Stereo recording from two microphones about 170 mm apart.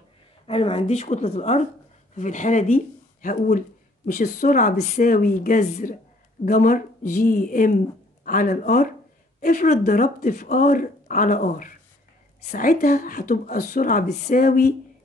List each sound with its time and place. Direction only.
0.5 s a woman's voice: 35° left (ahead or behind); by 14.7 s 55° left (ahead or behind)